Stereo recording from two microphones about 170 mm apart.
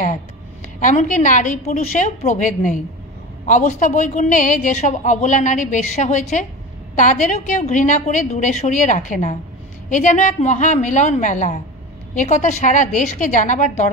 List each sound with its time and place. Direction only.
0.7 s a woman's voice: 50° left (ahead or behind)